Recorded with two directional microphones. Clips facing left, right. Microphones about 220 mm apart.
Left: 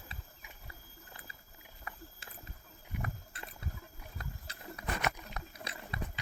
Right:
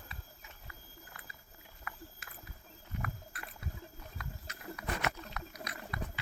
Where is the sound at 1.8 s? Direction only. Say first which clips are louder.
Even; 30° left (ahead or behind).